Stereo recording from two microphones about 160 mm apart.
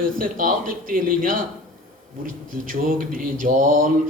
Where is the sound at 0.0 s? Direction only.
60° right (ahead or behind).